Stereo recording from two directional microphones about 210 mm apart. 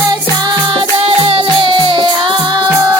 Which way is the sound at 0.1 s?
20° right (ahead or behind).